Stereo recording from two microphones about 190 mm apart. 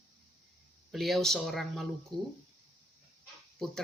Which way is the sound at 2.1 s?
25° right (ahead or behind).